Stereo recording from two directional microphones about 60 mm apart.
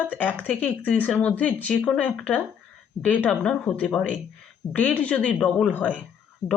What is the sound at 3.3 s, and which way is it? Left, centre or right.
Speech, centre.